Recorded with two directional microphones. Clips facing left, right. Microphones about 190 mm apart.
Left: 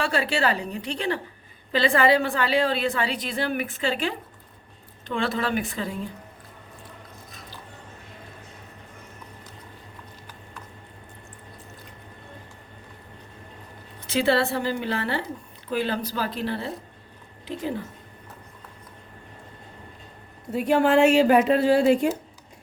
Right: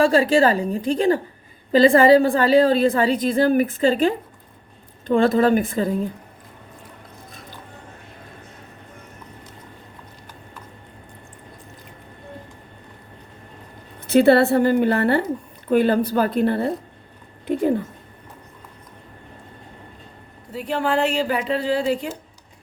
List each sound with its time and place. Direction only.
0.1 s a woman's voice: 45° right (ahead or behind)
14.1 s a woman's voice: 55° right (ahead or behind)
20.7 s speech: 45° left (ahead or behind)